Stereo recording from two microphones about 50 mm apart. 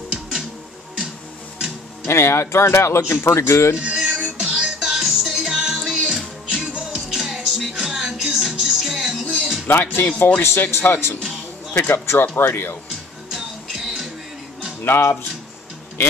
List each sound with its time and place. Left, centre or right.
2.0 s speech: left
3.7 s music: right
4.7 s music: centre
9.7 s speech: left
10.7 s speech: left
13.3 s music: centre
14.9 s speech: left